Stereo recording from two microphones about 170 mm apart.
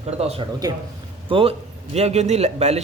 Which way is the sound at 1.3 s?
35° right (ahead or behind).